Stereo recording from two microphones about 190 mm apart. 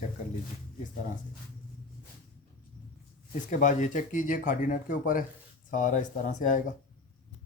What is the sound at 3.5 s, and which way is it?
Speech, 40° left (ahead or behind).